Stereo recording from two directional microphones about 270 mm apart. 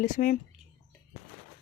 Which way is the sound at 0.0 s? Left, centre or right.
Left.